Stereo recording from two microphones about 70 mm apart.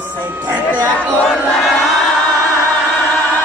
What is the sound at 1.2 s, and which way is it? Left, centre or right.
Crowd, centre.